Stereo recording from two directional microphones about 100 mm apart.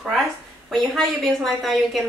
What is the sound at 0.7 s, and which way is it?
A woman's voice, centre (ahead or behind).